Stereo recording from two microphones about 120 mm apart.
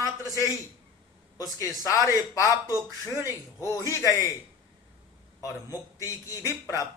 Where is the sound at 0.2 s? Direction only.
30° left (ahead or behind).